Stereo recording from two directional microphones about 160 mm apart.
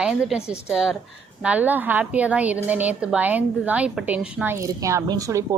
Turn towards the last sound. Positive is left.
turn(degrees=-20)  # may be behind; listen again after turning